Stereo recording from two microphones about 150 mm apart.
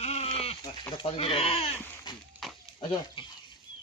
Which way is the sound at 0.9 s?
40° left (ahead or behind).